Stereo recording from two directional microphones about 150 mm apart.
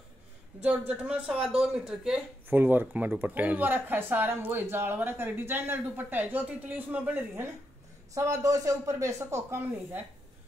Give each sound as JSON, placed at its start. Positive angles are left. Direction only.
{"t": 0.6, "sound": "speech", "side_deg": -10}